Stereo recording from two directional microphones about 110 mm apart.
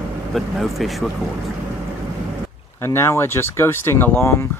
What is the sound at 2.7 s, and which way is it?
Speech, 25° left (ahead or behind).